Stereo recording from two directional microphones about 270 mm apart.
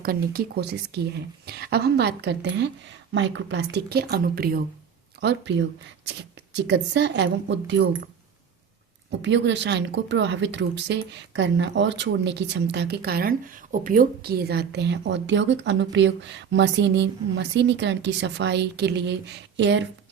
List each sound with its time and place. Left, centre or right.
0.0 s speech: right
9.0 s speech: right